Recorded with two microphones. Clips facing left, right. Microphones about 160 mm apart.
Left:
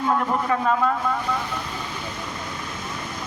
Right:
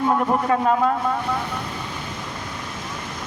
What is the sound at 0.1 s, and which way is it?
Speech, 25° right (ahead or behind).